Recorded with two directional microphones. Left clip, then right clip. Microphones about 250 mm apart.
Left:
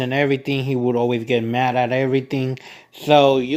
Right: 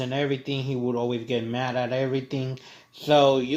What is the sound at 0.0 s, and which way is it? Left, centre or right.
Speech, left.